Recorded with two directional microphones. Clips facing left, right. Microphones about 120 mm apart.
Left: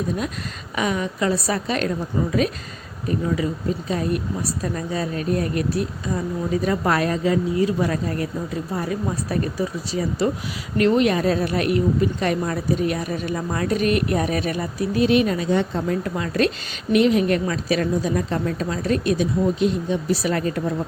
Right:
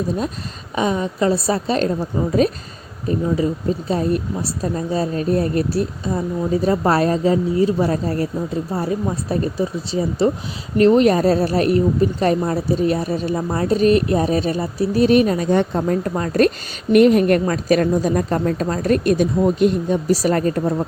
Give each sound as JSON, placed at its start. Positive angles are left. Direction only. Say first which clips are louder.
{"t": 0.8, "sound": "speech", "louder": "right 4 dB", "side_deg": -30}
{"t": 15.0, "sound": "a woman's voice", "louder": "right 4 dB", "side_deg": -40}